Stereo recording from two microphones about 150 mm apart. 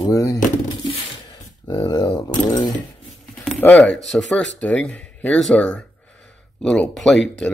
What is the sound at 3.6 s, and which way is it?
Speech, 10° left (ahead or behind).